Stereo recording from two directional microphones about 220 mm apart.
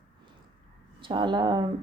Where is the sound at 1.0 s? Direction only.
20° right (ahead or behind).